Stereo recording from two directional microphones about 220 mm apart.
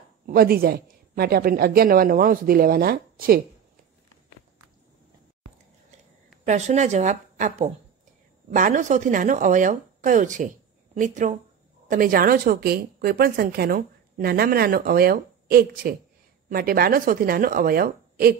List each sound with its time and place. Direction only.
0.3 s a woman's voice: 40° right (ahead or behind)
6.4 s a woman's voice: 30° right (ahead or behind)